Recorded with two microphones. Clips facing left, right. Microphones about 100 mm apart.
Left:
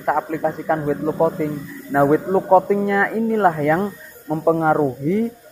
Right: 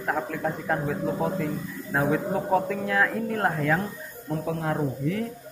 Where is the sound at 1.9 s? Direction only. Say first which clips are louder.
Left 9 dB; 60° left (ahead or behind).